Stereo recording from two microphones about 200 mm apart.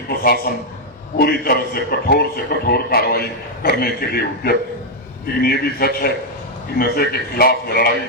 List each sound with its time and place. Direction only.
0.2 s a man's voice: 50° left (ahead or behind)